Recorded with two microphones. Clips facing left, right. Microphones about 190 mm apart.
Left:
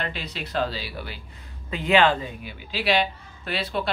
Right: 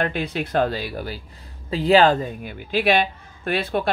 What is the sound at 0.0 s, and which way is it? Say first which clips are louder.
Speech: right 8 dB; 50° right (ahead or behind).